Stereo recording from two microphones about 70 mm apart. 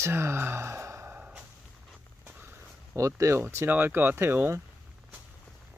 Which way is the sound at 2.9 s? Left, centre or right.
Right.